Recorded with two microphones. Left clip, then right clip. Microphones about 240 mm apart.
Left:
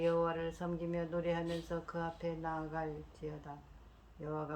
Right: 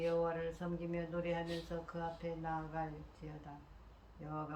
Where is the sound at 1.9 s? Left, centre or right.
Left.